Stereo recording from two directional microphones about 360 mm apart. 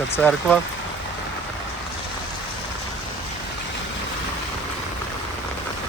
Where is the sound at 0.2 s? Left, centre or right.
Centre.